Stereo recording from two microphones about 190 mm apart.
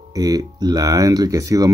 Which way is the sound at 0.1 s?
20° right (ahead or behind).